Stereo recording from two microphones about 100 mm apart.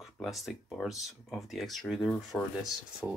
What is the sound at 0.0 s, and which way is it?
Speech, centre (ahead or behind).